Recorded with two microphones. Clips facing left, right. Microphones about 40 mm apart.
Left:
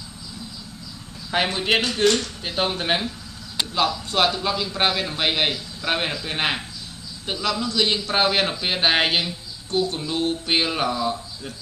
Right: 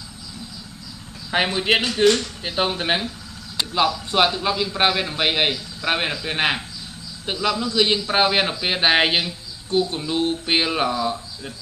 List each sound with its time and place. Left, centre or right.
1.3 s a man's voice: centre